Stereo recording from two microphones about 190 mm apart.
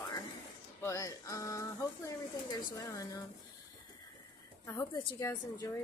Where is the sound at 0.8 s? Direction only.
15° left (ahead or behind).